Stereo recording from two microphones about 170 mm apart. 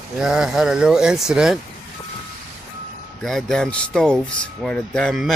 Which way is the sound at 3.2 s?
5° left (ahead or behind).